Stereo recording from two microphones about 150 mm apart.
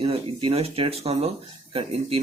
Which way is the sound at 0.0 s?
35° right (ahead or behind).